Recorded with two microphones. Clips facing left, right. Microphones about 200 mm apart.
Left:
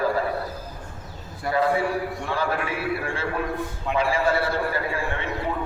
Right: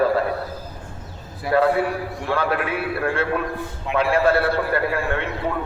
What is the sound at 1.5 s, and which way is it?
A man's voice, 65° right (ahead or behind).